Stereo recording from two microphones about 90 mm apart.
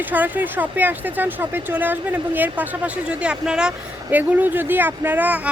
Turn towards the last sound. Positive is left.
turn(degrees=-15)  # may be behind; listen again after turning